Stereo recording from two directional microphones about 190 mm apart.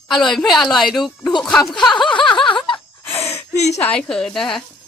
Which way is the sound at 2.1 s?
25° left (ahead or behind).